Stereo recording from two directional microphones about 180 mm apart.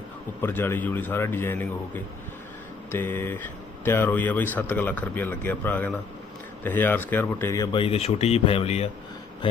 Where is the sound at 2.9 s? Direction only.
15° left (ahead or behind).